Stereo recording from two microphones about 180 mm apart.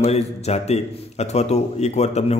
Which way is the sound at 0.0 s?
35° left (ahead or behind).